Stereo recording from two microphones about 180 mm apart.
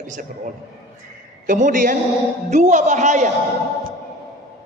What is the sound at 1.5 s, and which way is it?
A man's voice, 45° right (ahead or behind).